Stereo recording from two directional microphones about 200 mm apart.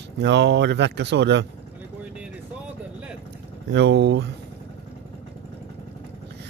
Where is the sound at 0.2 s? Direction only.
60° right (ahead or behind).